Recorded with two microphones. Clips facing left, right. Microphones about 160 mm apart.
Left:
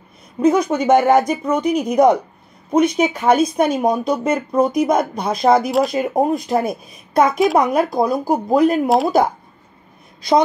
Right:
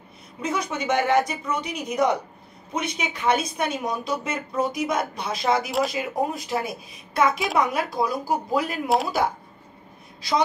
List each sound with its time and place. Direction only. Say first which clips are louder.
0.4 s speech: left 12 dB; 45° left (ahead or behind)
8.8 s speech: left 7 dB; centre (ahead or behind)